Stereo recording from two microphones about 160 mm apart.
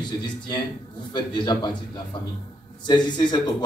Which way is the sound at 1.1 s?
25° left (ahead or behind).